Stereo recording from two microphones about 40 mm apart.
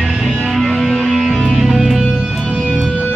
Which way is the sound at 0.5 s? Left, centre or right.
Centre.